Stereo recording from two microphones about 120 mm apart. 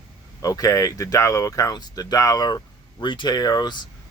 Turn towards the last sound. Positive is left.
turn(degrees=35)  # may be behind; listen again after turning